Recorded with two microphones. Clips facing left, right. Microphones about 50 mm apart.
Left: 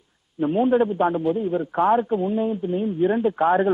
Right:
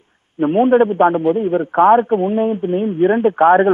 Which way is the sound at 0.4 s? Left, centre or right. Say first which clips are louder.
Right 7 dB; right.